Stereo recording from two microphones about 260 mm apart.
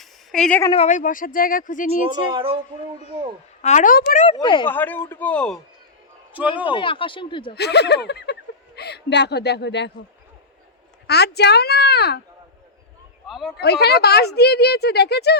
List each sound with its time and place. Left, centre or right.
0.0 s a sound: centre
0.7 s speech: left
2.3 s speech: right
3.6 s speech: left
4.3 s speech: centre
6.3 s a man's voice: centre
6.7 s speech: centre
7.5 s speech: left
11.0 s speech: left
13.2 s a sound: centre
13.6 s speech: left